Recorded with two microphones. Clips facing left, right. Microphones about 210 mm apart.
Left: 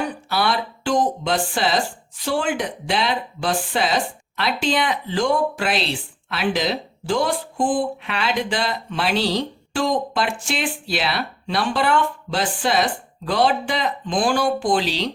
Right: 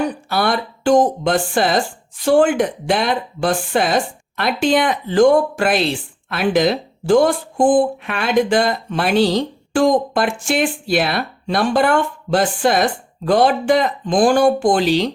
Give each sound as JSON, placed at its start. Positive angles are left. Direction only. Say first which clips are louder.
{"t": 0.3, "sound": "speech", "louder": "right 3 dB", "side_deg": -50}